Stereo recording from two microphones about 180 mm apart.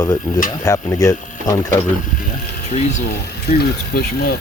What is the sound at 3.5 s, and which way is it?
Speech, 60° left (ahead or behind).